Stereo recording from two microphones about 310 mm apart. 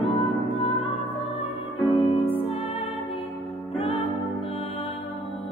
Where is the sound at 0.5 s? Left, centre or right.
Centre.